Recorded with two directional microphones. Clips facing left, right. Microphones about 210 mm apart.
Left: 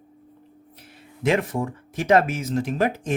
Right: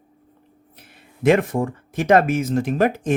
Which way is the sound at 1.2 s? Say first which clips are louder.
Right 5 dB; 50° right (ahead or behind).